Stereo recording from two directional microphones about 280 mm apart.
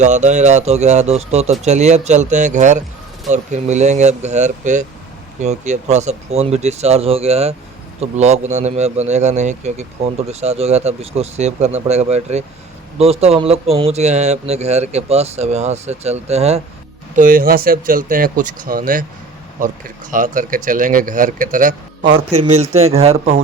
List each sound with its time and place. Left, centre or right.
0.0 s speech: right